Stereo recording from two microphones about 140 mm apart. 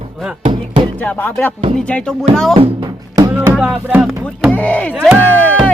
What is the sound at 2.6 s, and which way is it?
Music, 30° right (ahead or behind).